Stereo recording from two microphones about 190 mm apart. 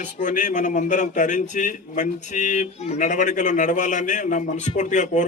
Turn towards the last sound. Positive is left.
turn(degrees=40)  # may be behind; listen again after turning